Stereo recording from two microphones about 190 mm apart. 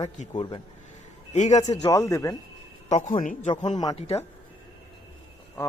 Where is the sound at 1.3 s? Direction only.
35° left (ahead or behind).